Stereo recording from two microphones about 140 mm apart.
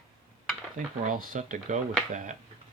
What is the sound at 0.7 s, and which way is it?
Speech, 75° right (ahead or behind).